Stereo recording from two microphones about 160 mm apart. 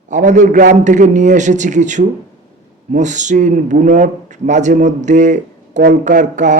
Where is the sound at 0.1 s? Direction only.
50° right (ahead or behind).